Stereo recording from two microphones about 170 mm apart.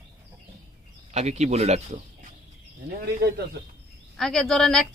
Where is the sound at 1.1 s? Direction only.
40° right (ahead or behind).